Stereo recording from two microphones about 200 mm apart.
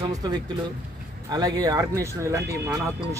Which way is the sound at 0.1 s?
20° right (ahead or behind).